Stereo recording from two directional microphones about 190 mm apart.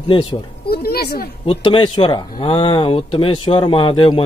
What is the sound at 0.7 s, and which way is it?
Speech, 55° left (ahead or behind).